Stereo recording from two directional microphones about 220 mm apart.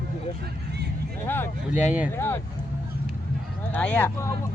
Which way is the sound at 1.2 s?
10° left (ahead or behind).